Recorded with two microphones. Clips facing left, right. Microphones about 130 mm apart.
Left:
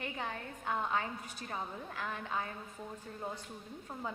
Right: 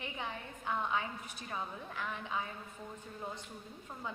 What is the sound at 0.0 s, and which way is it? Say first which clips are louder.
A woman's voice: left 2 dB; 45° left (ahead or behind).